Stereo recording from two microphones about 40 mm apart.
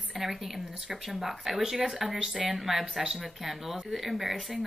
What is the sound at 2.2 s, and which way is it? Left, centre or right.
Speech, centre.